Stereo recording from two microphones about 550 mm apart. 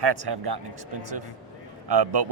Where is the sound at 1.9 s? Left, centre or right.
Right.